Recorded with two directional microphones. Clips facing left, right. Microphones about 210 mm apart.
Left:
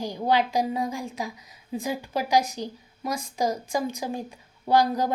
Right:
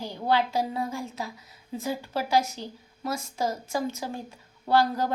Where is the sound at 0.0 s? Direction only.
15° left (ahead or behind).